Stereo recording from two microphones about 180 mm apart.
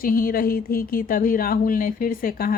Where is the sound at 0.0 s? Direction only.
55° left (ahead or behind).